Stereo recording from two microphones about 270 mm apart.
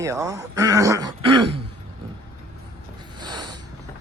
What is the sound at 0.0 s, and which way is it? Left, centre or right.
Speech, centre.